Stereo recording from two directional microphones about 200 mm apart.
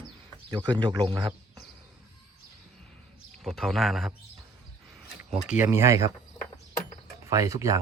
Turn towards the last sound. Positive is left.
turn(degrees=-15)  # may be behind; listen again after turning